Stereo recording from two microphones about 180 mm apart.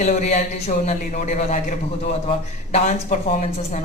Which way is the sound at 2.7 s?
40° left (ahead or behind).